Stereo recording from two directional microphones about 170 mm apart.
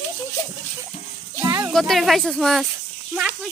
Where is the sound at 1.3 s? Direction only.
15° right (ahead or behind).